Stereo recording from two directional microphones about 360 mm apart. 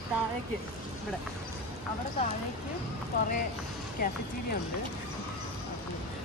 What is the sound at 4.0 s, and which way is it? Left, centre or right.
Speech, left.